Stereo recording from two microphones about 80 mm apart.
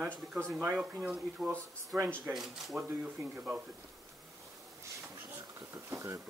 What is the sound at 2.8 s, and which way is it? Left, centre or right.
Speech, right.